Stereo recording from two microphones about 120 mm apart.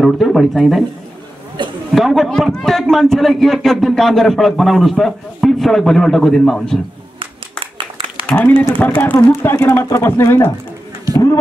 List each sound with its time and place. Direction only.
0.0 s a man's voice: centre (ahead or behind)
1.6 s chatter: 40° right (ahead or behind)
2.0 s a man's voice: centre (ahead or behind)
7.2 s music: 45° right (ahead or behind)
8.3 s speech: 15° left (ahead or behind)